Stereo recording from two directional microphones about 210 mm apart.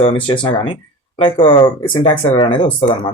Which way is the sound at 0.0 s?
25° left (ahead or behind).